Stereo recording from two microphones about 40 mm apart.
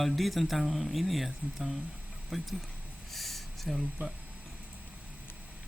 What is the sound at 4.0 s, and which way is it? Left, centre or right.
Speech, right.